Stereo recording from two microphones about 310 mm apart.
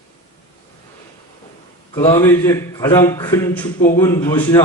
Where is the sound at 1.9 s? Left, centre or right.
Centre.